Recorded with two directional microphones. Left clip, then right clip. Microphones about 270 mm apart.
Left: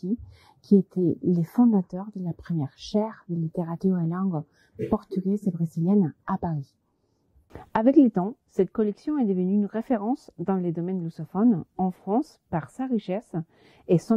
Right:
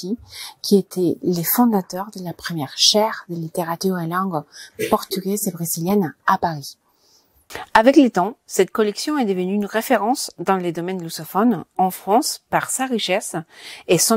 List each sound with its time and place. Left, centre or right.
0.0 s speech: centre
0.9 s a woman's voice: right
2.0 s a woman's voice: centre
5.4 s a woman's voice: centre
5.7 s a woman's voice: centre
7.5 s a woman's voice: centre